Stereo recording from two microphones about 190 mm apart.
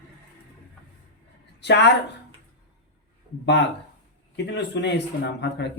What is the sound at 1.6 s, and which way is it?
Speech, 65° left (ahead or behind).